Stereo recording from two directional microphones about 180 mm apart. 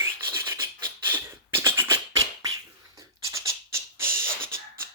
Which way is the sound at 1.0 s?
10° right (ahead or behind).